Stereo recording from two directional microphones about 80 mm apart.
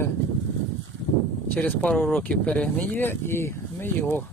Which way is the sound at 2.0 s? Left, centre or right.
Centre.